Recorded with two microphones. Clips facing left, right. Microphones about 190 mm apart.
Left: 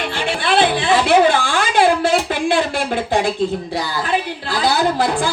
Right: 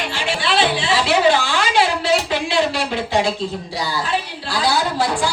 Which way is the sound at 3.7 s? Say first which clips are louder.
Left 2 dB; 55° left (ahead or behind).